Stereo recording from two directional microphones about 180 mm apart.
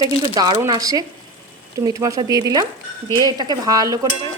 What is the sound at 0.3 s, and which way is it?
A woman's voice, 25° right (ahead or behind).